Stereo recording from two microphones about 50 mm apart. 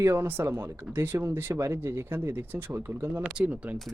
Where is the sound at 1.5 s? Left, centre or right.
Right.